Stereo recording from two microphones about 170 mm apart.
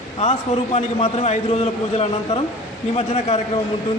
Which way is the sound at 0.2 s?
40° left (ahead or behind).